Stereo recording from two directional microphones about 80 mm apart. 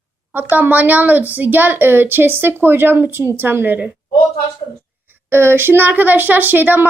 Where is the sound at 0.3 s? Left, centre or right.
Right.